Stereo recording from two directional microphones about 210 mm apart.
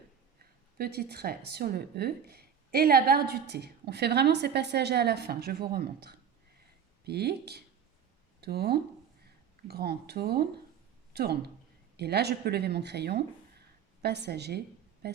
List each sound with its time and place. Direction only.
0.8 s speech: 50° right (ahead or behind)